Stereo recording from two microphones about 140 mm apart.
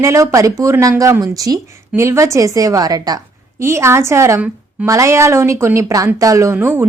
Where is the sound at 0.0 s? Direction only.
20° right (ahead or behind).